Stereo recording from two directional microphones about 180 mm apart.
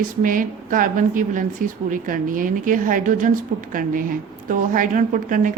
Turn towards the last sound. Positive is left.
turn(degrees=-45)  # may be behind; listen again after turning